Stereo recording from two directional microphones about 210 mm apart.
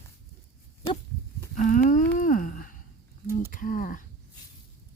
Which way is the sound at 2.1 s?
40° left (ahead or behind).